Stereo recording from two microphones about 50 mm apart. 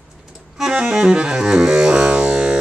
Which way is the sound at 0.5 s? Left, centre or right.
Centre.